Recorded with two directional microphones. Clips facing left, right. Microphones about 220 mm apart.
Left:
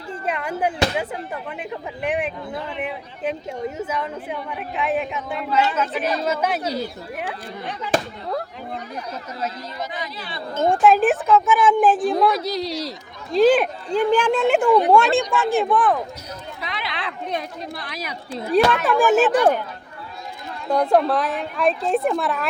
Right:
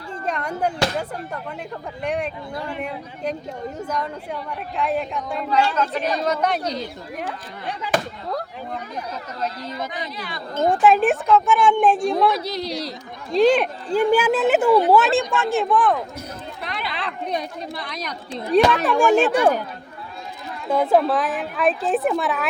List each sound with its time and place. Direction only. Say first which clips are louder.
0.3 s a woman's voice: left 1 dB; 5° left (ahead or behind)
10.2 s speech: right 1 dB; 30° left (ahead or behind)
10.7 s a woman's voice: left 1 dB; centre (ahead or behind)
20.7 s a woman's voice: even; centre (ahead or behind)